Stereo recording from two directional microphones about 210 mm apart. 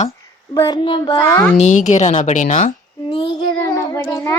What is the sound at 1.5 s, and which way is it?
A child's voice, 35° left (ahead or behind).